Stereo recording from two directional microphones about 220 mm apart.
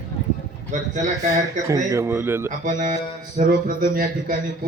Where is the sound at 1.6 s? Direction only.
15° right (ahead or behind).